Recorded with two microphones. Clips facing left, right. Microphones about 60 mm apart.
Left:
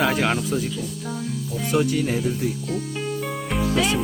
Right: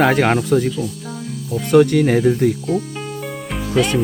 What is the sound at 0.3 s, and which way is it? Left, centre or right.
Speech, right.